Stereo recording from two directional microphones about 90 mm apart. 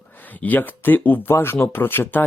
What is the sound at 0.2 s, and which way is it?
Speech, 20° left (ahead or behind).